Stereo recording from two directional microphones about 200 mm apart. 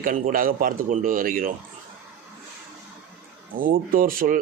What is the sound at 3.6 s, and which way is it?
Speech, 45° right (ahead or behind).